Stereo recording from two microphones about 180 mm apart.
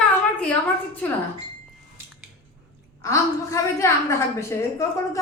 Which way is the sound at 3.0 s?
15° left (ahead or behind).